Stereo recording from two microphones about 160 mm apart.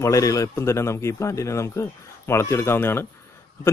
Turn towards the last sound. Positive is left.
turn(degrees=15)  # may be behind; listen again after turning